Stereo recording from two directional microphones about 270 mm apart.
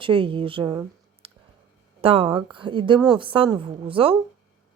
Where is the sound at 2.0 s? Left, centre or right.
Right.